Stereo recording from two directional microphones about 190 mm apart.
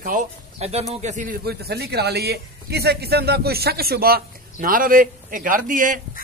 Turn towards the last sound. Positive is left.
turn(degrees=-45)  # may be behind; listen again after turning